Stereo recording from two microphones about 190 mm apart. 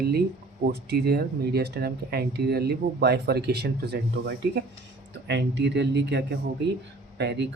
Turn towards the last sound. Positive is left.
turn(degrees=-65)  # may be behind; listen again after turning